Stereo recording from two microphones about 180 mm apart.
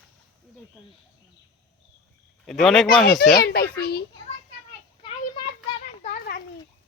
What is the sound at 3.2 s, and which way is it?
Speech, 60° left (ahead or behind).